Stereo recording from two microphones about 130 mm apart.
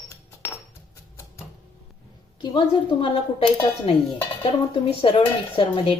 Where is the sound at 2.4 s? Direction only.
35° left (ahead or behind).